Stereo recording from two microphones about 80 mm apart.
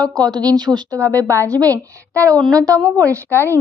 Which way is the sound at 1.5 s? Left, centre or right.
Right.